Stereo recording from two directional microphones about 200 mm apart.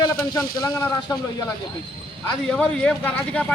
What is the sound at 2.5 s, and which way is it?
Speech, 5° left (ahead or behind).